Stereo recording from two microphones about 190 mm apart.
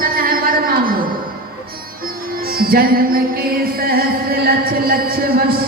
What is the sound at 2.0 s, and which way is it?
Music, 50° right (ahead or behind).